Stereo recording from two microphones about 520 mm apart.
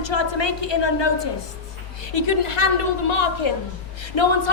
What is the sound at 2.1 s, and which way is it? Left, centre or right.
A woman's voice, left.